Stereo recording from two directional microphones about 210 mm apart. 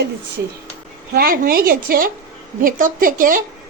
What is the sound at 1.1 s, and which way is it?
A woman's voice, 45° right (ahead or behind).